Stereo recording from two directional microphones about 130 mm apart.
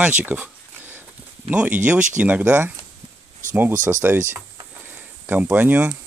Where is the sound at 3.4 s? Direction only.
75° right (ahead or behind).